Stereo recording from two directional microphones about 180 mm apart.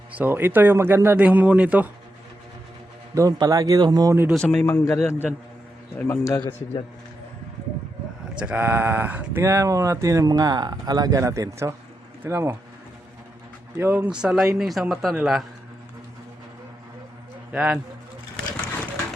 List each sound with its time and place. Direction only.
0.2 s speech: 10° right (ahead or behind)
3.2 s speech: 20° right (ahead or behind)
4.4 s speech: 5° left (ahead or behind)
4.6 s a man's voice: 15° left (ahead or behind)
8.4 s speech: 10° right (ahead or behind)
13.7 s speech: 10° right (ahead or behind)
17.5 s speech: 5° right (ahead or behind)